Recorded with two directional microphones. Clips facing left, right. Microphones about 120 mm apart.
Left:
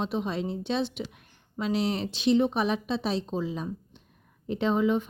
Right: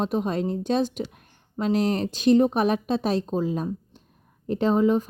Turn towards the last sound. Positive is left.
turn(degrees=-40)  # may be behind; listen again after turning